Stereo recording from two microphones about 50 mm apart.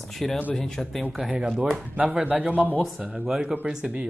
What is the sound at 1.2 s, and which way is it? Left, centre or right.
Speech, centre.